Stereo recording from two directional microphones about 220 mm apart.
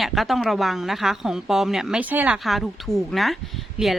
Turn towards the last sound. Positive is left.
turn(degrees=0)  # may be behind; listen again after turning